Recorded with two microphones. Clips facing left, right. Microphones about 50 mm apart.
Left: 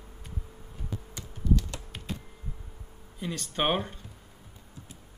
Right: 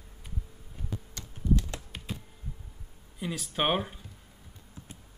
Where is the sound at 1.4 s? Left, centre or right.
Right.